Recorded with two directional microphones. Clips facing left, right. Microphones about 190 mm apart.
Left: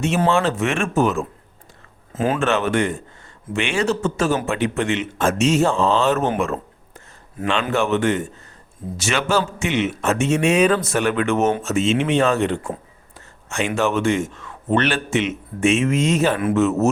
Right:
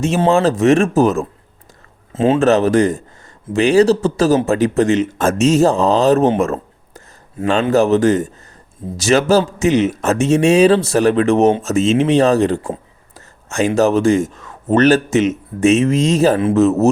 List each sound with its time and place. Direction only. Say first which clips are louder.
0.2 s speech: right 7 dB; 35° right (ahead or behind)
2.1 s speech: right 7 dB; 25° right (ahead or behind)
2.5 s speech: right 7 dB; 40° right (ahead or behind)